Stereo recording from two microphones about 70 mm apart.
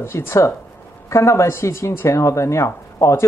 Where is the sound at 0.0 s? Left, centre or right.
Left.